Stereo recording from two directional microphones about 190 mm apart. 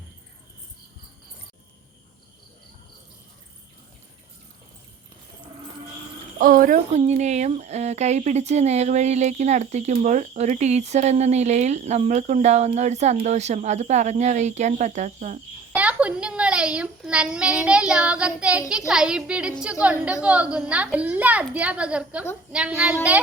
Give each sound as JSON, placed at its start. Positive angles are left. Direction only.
{"t": 6.4, "sound": "speech", "side_deg": -45}
{"t": 15.7, "sound": "a child's voice", "side_deg": -5}